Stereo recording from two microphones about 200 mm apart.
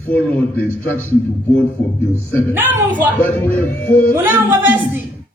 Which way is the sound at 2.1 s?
10° right (ahead or behind).